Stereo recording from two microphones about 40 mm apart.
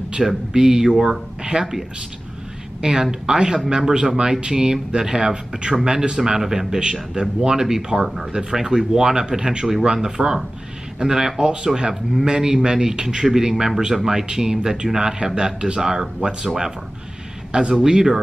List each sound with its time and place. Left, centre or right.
0.2 s speech: centre
2.8 s a man's voice: centre
11.9 s speech: centre
12.3 s a man's voice: centre